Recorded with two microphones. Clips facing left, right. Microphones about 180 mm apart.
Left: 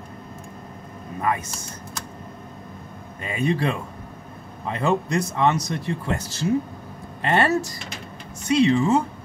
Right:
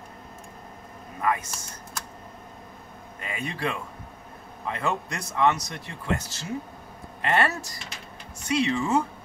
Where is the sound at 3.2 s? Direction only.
25° left (ahead or behind).